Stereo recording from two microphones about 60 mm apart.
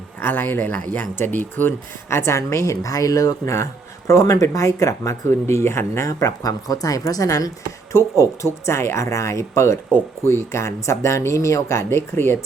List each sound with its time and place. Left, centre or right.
0.2 s speech: left
2.0 s a woman's voice: left
6.1 s speech: left
7.9 s a woman's voice: left
8.6 s speech: left
9.0 s a woman's voice: left